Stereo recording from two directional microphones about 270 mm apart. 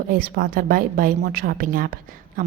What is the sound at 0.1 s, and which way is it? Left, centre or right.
A woman's voice, right.